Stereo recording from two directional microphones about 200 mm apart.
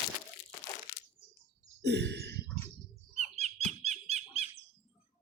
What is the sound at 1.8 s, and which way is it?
Sigh, 60° right (ahead or behind).